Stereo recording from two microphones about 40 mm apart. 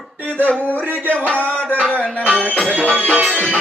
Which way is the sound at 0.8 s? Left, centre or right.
Right.